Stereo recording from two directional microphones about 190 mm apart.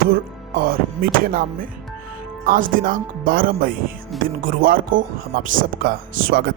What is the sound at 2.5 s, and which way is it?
Speech, 45° right (ahead or behind).